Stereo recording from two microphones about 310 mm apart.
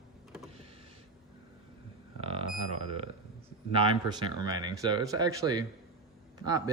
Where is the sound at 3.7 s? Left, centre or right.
Centre.